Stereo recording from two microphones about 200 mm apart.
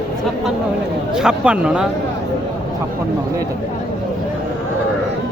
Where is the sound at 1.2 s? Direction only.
5° right (ahead or behind).